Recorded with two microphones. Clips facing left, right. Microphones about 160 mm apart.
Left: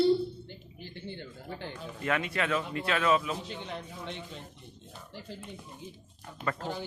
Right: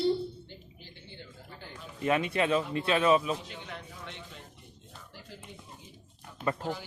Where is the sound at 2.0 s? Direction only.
20° right (ahead or behind).